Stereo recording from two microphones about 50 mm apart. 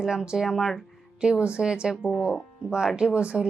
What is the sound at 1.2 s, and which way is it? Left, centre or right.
Speech, centre.